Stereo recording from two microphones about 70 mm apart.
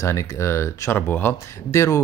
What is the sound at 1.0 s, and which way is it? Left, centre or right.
Speech, left.